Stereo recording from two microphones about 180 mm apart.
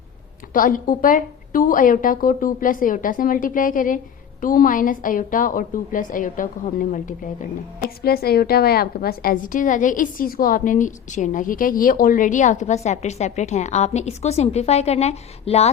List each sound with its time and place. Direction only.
0.5 s a woman's voice: 50° left (ahead or behind)